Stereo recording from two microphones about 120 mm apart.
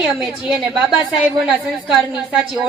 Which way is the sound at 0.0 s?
Centre (ahead or behind).